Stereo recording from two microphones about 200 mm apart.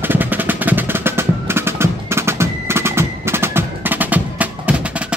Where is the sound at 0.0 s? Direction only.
10° right (ahead or behind).